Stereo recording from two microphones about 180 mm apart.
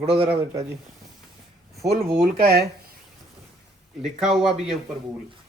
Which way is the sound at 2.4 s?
60° right (ahead or behind).